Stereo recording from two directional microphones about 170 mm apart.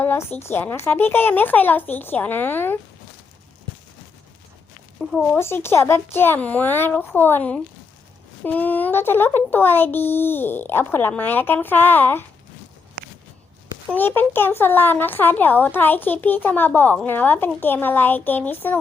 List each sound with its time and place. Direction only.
0.0 s speech: 10° left (ahead or behind)
4.9 s speech: centre (ahead or behind)
5.4 s speech: 15° left (ahead or behind)
13.0 s a sound: 55° right (ahead or behind)
13.9 s speech: 10° left (ahead or behind)